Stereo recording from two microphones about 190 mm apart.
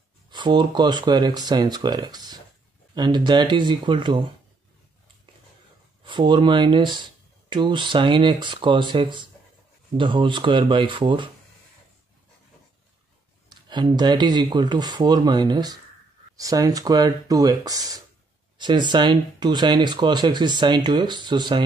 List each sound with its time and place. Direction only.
0.3 s speech: 25° right (ahead or behind)
6.0 s speech: 25° right (ahead or behind)
13.5 s speech: 25° right (ahead or behind)